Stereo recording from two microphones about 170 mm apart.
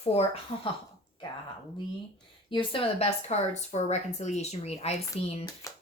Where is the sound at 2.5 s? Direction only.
30° left (ahead or behind).